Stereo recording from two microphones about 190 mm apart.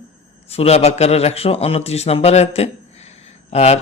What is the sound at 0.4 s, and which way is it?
A man's voice, 30° left (ahead or behind).